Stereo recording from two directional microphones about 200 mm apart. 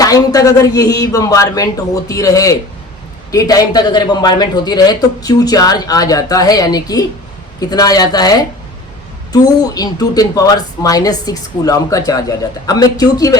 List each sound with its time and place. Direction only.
0.0 s a man's voice: 20° left (ahead or behind)